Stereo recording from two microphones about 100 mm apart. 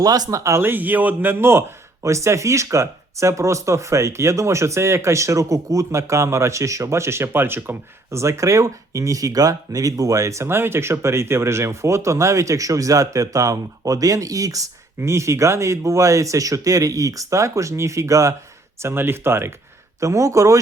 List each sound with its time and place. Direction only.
0.0 s a man's voice: 40° right (ahead or behind)